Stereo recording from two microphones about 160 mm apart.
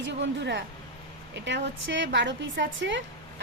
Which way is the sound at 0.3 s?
90° right.